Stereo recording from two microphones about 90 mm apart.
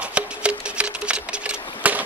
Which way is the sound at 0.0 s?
15° right (ahead or behind).